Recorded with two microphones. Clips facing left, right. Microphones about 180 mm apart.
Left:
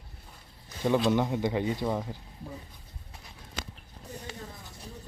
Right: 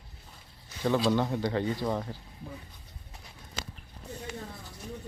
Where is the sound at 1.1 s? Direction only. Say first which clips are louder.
Left 1 dB; 15° left (ahead or behind).